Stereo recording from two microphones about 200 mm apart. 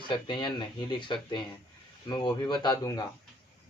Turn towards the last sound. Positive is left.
turn(degrees=20)  # may be behind; listen again after turning